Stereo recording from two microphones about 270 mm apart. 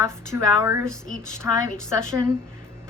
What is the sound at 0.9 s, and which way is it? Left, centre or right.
Speech, centre.